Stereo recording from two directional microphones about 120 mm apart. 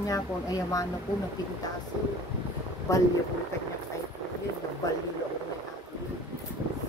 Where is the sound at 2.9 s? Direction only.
30° left (ahead or behind).